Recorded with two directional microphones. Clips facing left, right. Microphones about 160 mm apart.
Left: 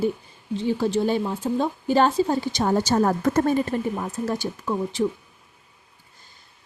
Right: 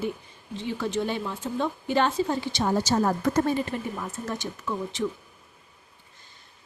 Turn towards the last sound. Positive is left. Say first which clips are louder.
# left 5 dB
turn(degrees=35)  # may be behind; listen again after turning